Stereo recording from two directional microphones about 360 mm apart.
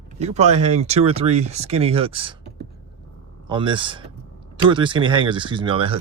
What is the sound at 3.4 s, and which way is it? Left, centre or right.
Speech, centre.